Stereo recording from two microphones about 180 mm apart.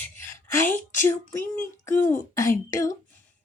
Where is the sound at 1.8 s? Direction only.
15° left (ahead or behind).